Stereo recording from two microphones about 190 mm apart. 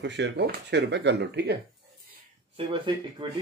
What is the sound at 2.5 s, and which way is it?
Speech, 30° right (ahead or behind).